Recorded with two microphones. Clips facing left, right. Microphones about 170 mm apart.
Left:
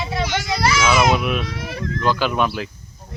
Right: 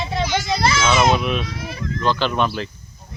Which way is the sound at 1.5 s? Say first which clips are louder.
Left 2 dB; 65° left (ahead or behind).